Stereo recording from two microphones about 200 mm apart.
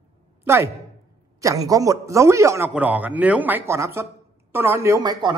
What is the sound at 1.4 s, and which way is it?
Speech, 15° right (ahead or behind).